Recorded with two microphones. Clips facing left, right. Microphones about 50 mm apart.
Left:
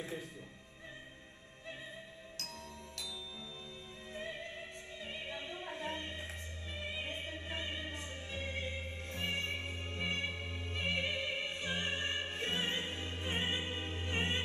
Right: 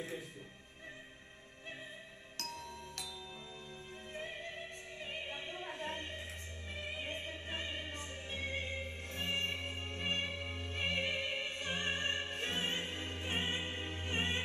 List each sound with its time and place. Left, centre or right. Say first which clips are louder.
4.4 s music: even; right